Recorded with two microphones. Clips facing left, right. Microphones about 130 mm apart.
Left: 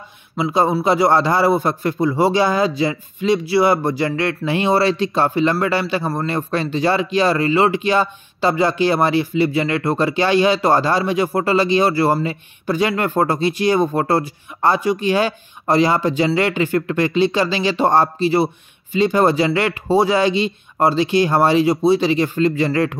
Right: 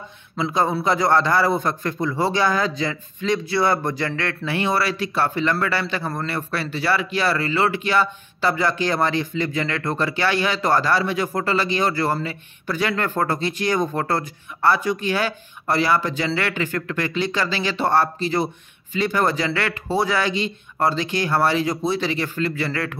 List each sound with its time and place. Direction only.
0.4 s a man's voice: 15° left (ahead or behind)